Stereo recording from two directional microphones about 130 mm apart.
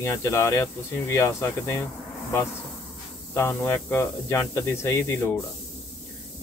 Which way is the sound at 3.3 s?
20° left (ahead or behind).